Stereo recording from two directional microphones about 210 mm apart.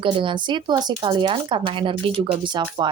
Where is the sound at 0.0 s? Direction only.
25° right (ahead or behind).